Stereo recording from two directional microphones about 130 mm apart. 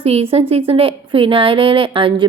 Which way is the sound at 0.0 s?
45° right (ahead or behind).